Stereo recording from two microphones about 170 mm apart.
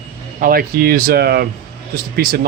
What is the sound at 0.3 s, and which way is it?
Speech, 60° right (ahead or behind).